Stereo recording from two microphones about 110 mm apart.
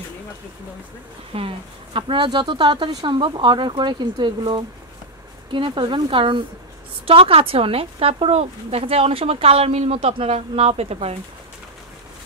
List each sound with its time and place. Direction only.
1.3 s speech: 60° right (ahead or behind)
2.0 s speech: 50° right (ahead or behind)
2.9 s speech: 35° right (ahead or behind)
3.2 s speech: 50° right (ahead or behind); by 11.1 s 65° right (ahead or behind)